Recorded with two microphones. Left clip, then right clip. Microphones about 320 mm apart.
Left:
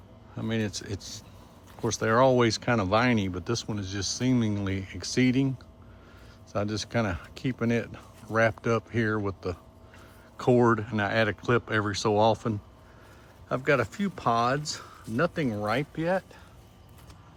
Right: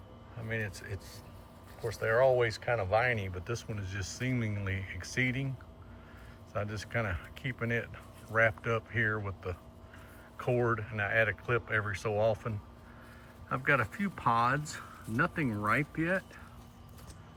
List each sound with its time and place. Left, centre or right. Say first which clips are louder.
0.7 s speech: left 8 dB; centre
6.5 s speech: left 6 dB; centre
10.6 s speech: left 7 dB; centre